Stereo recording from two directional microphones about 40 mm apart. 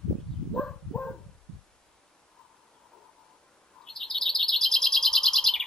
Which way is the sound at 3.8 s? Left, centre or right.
Centre.